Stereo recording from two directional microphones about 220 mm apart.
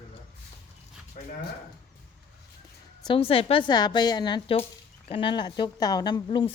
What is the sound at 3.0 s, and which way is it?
A woman's voice, 25° left (ahead or behind).